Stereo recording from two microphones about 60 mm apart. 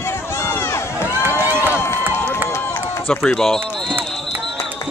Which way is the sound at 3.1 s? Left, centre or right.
Centre.